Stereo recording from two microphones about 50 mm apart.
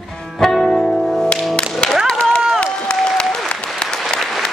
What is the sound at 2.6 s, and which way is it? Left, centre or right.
Applause, centre.